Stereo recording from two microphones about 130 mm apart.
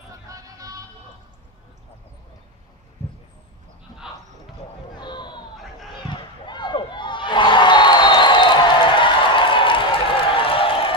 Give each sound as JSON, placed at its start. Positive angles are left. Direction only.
{"t": 0.3, "sound": "vehicle", "side_deg": -25}
{"t": 5.0, "sound": "a sound", "side_deg": 35}
{"t": 6.0, "sound": "crowd", "side_deg": 35}